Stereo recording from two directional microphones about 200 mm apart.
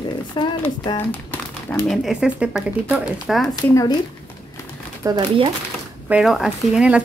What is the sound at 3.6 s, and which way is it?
Speech, 15° left (ahead or behind).